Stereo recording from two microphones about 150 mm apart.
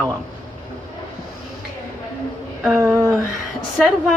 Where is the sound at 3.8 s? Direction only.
Centre (ahead or behind).